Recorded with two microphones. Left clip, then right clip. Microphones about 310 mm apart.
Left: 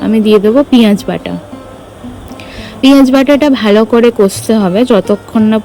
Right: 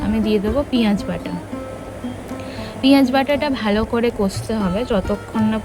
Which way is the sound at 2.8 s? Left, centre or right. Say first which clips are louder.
Left 9 dB; centre.